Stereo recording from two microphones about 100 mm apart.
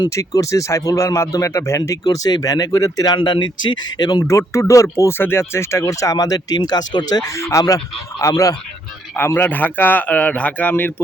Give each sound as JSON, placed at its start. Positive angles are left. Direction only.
{"t": 0.0, "sound": "speech", "side_deg": 35}
{"t": 2.0, "sound": "speech", "side_deg": 40}
{"t": 4.3, "sound": "speech", "side_deg": 30}
{"t": 9.1, "sound": "a man's voice", "side_deg": 20}